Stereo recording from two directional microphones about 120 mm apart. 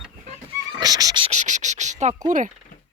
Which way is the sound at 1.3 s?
90° right.